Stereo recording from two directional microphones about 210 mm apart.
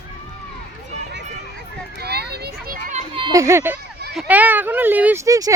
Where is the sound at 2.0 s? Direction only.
50° right (ahead or behind).